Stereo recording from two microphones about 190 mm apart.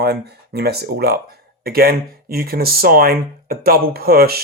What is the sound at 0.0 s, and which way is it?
Speech, 60° right (ahead or behind).